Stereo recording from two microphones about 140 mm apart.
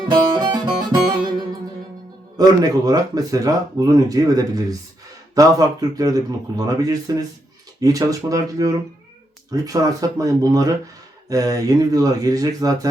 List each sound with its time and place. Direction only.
0.0 s music: 30° right (ahead or behind)
2.4 s speech: 25° right (ahead or behind)